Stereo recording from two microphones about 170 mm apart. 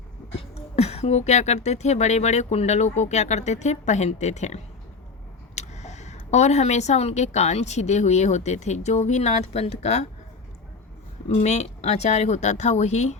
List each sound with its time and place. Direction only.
0.3 s speech: 40° left (ahead or behind)
11.3 s speech: 40° left (ahead or behind)